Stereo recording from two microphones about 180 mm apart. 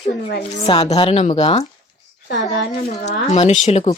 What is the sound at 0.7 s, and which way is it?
A woman's voice, 35° left (ahead or behind).